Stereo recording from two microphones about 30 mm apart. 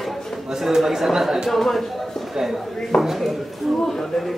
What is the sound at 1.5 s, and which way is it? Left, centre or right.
Speech, centre.